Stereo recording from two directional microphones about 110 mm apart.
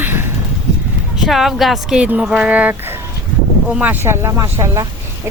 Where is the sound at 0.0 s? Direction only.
20° right (ahead or behind).